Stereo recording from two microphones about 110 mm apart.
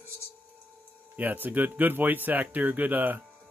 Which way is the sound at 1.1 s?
15° right (ahead or behind).